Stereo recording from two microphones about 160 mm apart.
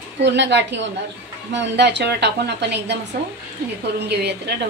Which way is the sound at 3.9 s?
90° right.